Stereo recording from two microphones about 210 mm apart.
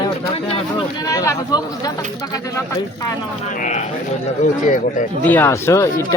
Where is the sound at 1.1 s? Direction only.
15° left (ahead or behind).